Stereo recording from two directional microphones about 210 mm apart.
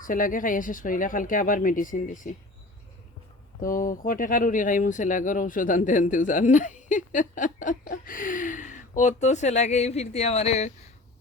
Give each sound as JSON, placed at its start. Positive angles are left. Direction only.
{"t": 0.0, "sound": "speech", "side_deg": 40}
{"t": 3.6, "sound": "speech", "side_deg": 40}